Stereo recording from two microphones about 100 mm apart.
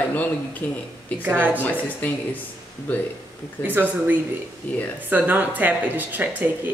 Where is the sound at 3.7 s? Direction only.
20° right (ahead or behind).